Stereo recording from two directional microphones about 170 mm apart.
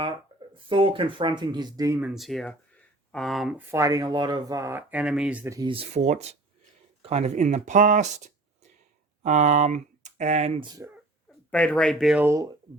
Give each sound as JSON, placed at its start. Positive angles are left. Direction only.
{"t": 0.7, "sound": "speech", "side_deg": -30}
{"t": 2.0, "sound": "speech", "side_deg": 0}
{"t": 3.7, "sound": "speech", "side_deg": -20}
{"t": 5.6, "sound": "speech", "side_deg": -35}
{"t": 10.6, "sound": "speech", "side_deg": -20}
{"t": 11.5, "sound": "speech", "side_deg": 5}
{"t": 12.2, "sound": "speech", "side_deg": -15}